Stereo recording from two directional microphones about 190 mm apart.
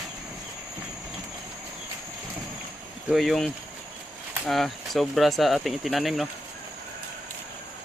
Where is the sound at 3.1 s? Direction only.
Centre (ahead or behind).